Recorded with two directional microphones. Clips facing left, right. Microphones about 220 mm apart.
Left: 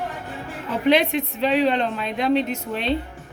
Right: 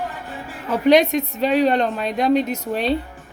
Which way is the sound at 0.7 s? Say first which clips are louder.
Right 4 dB; 45° right (ahead or behind).